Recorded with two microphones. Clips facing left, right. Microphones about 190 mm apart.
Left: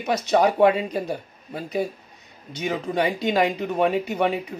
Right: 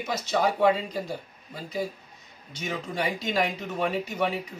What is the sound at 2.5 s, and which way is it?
Speech, 60° left (ahead or behind).